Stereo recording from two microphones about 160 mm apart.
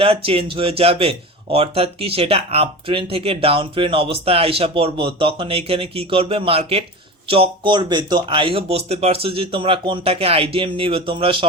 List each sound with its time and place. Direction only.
0.0 s speech: 35° right (ahead or behind)